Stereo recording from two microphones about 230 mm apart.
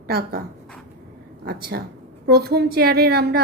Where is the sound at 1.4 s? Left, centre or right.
Right.